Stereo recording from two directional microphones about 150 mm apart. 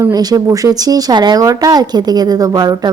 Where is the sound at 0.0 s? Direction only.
25° right (ahead or behind).